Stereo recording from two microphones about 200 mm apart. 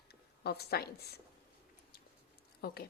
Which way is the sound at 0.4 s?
55° left (ahead or behind).